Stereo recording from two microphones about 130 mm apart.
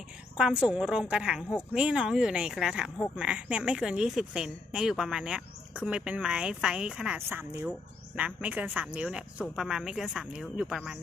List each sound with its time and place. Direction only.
0.3 s a woman's voice: 5° right (ahead or behind)
7.3 s speech: 20° right (ahead or behind)